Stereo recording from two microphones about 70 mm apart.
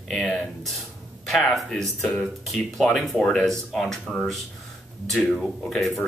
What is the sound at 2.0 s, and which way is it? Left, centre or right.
Speech, centre.